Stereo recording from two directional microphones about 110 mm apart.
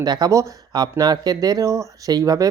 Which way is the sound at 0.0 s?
35° right (ahead or behind).